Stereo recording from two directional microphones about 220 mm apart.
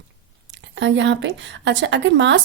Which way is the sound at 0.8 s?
55° right (ahead or behind).